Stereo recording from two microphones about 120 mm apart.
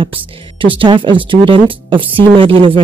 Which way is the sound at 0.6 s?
45° right (ahead or behind).